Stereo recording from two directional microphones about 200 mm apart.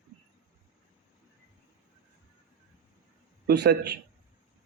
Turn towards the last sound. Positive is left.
turn(degrees=-55)  # may be behind; listen again after turning